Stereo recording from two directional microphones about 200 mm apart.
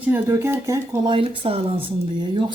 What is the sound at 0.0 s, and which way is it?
Speech, 10° right (ahead or behind).